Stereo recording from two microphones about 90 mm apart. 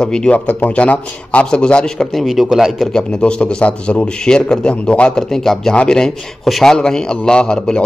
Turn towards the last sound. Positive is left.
turn(degrees=10)  # may be behind; listen again after turning